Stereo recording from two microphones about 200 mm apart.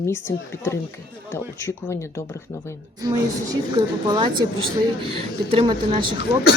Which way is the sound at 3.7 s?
20° right (ahead or behind).